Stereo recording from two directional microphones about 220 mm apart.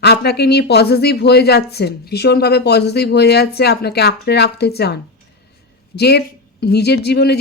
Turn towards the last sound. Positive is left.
turn(degrees=45)  # may be behind; listen again after turning